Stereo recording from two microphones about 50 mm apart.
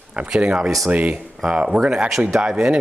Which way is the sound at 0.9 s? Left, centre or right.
Right.